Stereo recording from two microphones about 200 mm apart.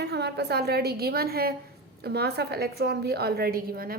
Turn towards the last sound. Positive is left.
turn(degrees=-50)  # may be behind; listen again after turning